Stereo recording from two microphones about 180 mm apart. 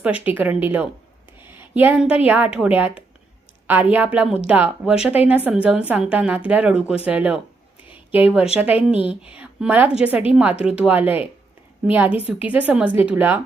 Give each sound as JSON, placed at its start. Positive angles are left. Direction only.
{"t": 0.0, "sound": "a woman's voice", "side_deg": -10}